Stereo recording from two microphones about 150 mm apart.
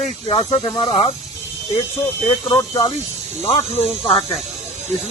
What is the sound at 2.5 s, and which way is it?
Speech, 30° left (ahead or behind).